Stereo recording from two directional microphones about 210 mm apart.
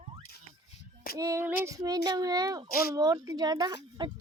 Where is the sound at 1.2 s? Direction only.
15° right (ahead or behind).